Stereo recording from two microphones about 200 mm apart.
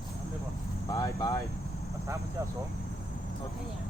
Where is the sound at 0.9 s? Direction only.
15° left (ahead or behind).